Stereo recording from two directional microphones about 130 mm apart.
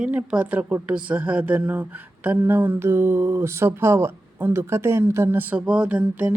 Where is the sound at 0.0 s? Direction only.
10° right (ahead or behind).